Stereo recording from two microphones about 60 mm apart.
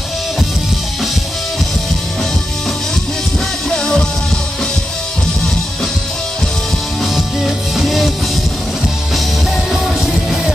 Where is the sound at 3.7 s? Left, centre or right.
Centre.